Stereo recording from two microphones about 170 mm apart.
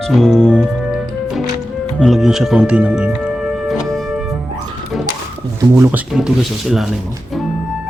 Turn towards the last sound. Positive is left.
turn(degrees=0)  # may be behind; listen again after turning